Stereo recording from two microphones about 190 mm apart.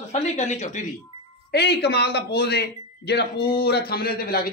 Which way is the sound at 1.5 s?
60° left (ahead or behind).